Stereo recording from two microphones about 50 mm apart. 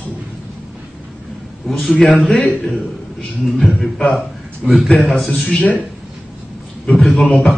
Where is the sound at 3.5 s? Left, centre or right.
Centre.